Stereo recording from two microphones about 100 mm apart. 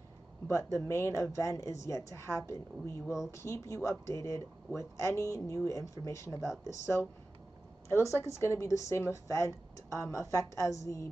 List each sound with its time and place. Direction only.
0.5 s speech: 30° left (ahead or behind)